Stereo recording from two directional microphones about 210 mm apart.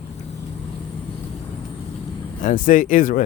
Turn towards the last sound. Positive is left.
turn(degrees=40)  # may be behind; listen again after turning